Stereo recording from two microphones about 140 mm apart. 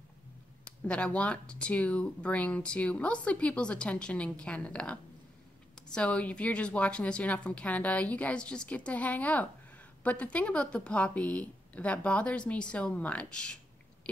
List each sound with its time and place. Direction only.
0.8 s speech: 10° left (ahead or behind)